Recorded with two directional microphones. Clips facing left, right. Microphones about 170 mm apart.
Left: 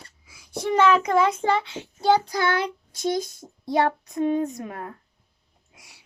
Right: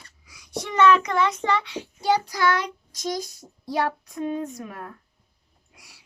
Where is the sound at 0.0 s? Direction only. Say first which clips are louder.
Left 3 dB; 25° left (ahead or behind).